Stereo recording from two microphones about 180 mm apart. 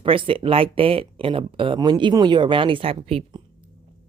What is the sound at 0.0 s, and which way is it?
Speech, 30° right (ahead or behind).